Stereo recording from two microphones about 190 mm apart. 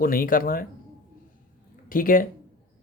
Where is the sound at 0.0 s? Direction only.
50° left (ahead or behind).